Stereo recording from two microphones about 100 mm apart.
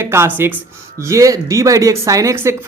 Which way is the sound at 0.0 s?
25° right (ahead or behind).